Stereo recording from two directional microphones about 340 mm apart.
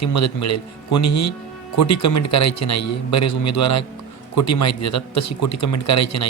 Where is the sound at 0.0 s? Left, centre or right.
Left.